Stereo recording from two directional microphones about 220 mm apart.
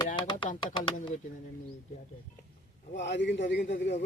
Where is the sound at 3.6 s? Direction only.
35° left (ahead or behind).